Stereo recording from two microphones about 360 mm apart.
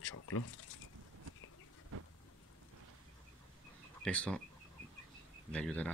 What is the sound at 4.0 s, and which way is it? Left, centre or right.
Speech, centre.